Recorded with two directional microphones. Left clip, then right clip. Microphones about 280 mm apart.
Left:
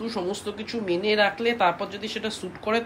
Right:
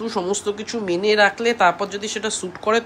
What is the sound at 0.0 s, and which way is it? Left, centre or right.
A woman's voice, centre.